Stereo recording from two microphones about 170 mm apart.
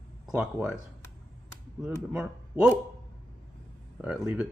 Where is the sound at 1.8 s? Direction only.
5° right (ahead or behind).